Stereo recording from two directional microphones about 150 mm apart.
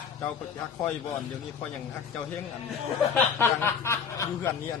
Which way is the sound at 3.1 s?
15° left (ahead or behind).